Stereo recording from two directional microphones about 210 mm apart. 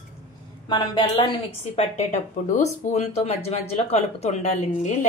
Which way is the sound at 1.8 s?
35° left (ahead or behind).